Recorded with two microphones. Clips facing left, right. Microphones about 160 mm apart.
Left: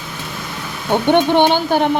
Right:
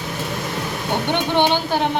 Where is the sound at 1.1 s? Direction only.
55° left (ahead or behind).